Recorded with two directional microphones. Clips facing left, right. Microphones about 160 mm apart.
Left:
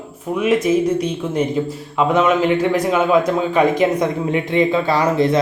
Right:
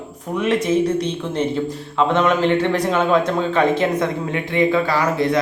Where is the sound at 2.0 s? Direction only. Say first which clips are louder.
Left 2 dB; 5° left (ahead or behind).